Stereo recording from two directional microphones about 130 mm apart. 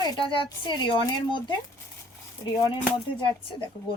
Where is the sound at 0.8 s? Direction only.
40° left (ahead or behind).